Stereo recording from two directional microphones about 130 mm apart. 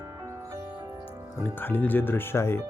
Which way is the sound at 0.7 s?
10° right (ahead or behind).